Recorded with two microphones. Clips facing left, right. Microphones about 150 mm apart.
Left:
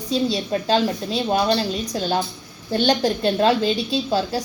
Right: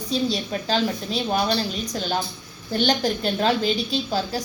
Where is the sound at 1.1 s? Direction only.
35° left (ahead or behind).